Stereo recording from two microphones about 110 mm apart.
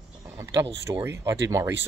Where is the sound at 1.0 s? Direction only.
25° right (ahead or behind).